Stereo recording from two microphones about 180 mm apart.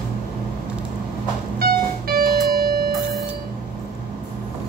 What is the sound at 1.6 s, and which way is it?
Music, 55° right (ahead or behind).